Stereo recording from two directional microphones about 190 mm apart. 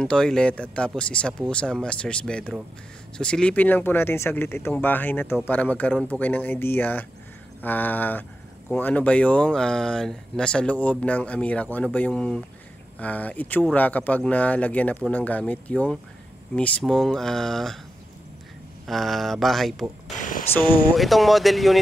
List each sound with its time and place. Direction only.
0.0 s speech: 5° left (ahead or behind)
18.9 s speech: centre (ahead or behind)
20.2 s speech: 45° left (ahead or behind)
20.9 s speech: centre (ahead or behind)